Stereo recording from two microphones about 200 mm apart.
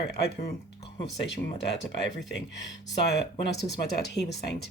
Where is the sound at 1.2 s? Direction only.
60° left (ahead or behind).